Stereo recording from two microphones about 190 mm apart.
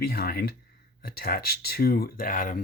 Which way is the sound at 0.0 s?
55° left (ahead or behind).